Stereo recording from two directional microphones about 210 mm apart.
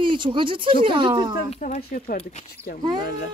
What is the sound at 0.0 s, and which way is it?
Speech, 25° right (ahead or behind).